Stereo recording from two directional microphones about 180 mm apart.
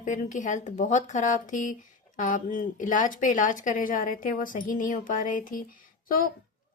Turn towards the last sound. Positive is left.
turn(degrees=50)  # may be behind; listen again after turning